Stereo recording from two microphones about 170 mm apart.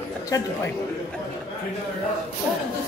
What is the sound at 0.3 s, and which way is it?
Speech, 20° left (ahead or behind).